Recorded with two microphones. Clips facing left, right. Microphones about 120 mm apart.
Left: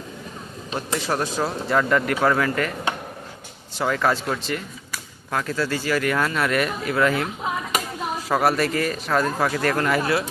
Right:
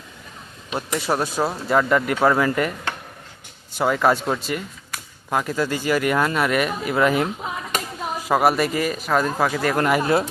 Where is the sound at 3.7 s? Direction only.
10° right (ahead or behind).